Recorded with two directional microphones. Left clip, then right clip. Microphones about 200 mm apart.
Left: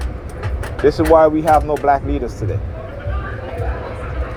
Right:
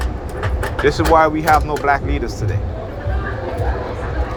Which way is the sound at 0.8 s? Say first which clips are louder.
Left 2 dB; 45° left (ahead or behind).